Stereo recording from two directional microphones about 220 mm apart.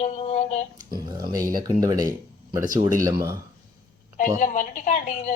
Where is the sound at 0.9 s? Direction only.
20° right (ahead or behind).